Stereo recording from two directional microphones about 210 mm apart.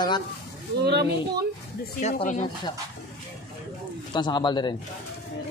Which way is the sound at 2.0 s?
35° left (ahead or behind).